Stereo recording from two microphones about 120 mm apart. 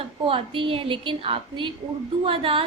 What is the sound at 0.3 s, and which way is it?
A woman's voice, 50° right (ahead or behind).